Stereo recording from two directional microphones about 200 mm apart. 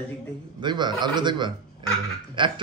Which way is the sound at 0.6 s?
20° right (ahead or behind).